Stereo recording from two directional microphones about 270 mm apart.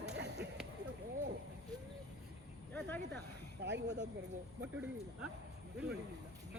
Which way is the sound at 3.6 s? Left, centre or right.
Right.